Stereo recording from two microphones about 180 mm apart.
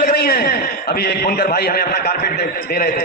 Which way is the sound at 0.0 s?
55° left (ahead or behind).